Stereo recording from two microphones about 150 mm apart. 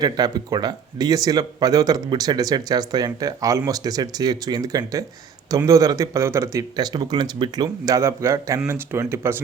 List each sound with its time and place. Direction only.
0.0 s speech: 25° right (ahead or behind)